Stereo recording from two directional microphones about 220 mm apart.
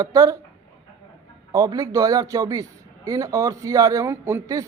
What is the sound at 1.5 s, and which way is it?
A man's voice, 15° right (ahead or behind).